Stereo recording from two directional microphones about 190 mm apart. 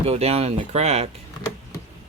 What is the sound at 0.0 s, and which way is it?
Speech, 30° right (ahead or behind).